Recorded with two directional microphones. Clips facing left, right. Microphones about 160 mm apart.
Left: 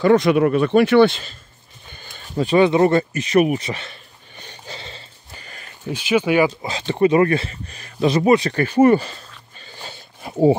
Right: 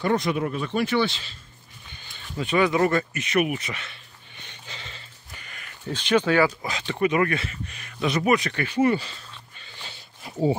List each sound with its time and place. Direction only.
0.0 s speech: 85° left; by 1.3 s 55° left (ahead or behind)
2.0 s a sound: 45° left (ahead or behind)
5.9 s speech: 10° left (ahead or behind)
6.7 s speech: 30° left (ahead or behind); by 10.4 s 50° left (ahead or behind)